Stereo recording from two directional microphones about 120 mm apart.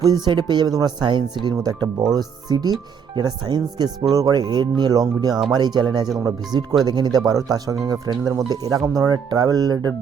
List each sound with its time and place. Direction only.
0.3 s speech: 40° right (ahead or behind)